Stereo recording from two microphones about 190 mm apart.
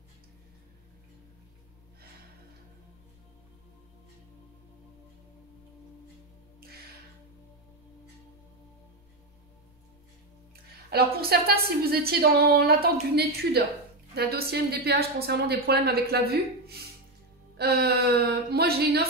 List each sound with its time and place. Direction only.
6.6 s music: 55° right (ahead or behind)
10.5 s a woman's voice: 55° right (ahead or behind)